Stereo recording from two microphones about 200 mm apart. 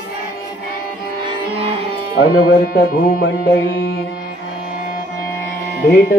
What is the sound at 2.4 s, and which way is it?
Music, 50° left (ahead or behind).